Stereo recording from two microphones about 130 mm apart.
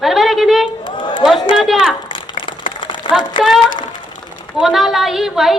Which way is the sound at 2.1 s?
40° left (ahead or behind).